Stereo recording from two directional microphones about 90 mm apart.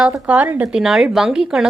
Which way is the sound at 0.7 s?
5° right (ahead or behind).